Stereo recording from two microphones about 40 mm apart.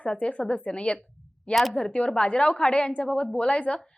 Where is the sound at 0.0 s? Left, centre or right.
Left.